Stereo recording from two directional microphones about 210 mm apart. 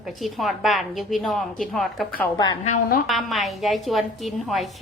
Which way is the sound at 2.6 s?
40° left (ahead or behind).